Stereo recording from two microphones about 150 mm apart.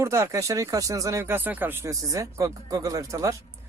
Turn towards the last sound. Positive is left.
turn(degrees=-20)  # may be behind; listen again after turning